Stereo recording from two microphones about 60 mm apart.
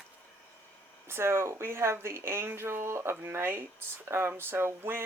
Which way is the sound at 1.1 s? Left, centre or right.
Right.